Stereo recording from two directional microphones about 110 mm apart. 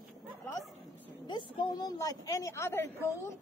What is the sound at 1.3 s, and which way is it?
A woman's voice, 40° left (ahead or behind).